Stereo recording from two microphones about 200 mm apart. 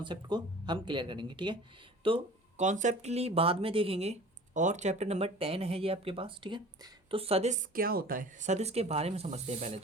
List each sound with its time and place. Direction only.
0.0 s speech: 20° right (ahead or behind)